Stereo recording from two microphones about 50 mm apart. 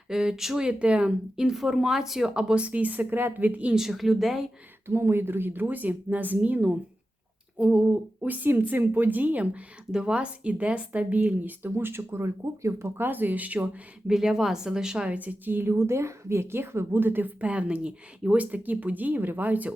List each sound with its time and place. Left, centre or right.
0.1 s speech: centre
1.5 s speech: centre
2.6 s speech: right
3.8 s speech: centre
4.9 s speech: right
7.6 s speech: right
11.6 s speech: right
13.0 s speech: right
14.1 s speech: centre
15.2 s a woman's voice: right
17.4 s speech: right